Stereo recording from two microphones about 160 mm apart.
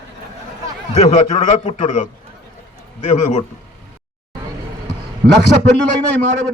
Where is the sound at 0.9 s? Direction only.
50° left (ahead or behind).